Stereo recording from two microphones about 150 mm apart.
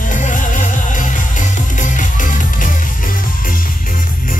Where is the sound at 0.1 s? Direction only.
60° left (ahead or behind).